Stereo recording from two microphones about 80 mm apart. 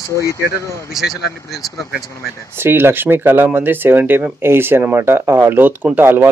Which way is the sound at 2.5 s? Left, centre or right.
Right.